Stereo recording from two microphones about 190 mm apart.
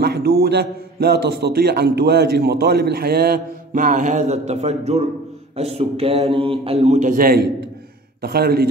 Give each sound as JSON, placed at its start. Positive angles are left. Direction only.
{"t": 0.0, "sound": "a man's voice", "side_deg": -60}